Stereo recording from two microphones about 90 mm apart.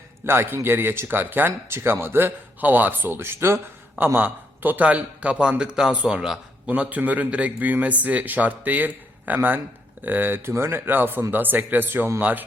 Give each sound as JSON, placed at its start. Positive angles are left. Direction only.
{"t": 0.3, "sound": "speech", "side_deg": -25}
{"t": 6.7, "sound": "a man's voice", "side_deg": -20}